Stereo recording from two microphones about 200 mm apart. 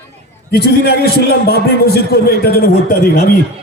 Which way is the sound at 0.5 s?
55° left (ahead or behind).